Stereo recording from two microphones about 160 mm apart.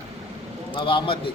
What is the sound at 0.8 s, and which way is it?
Speech, 30° left (ahead or behind).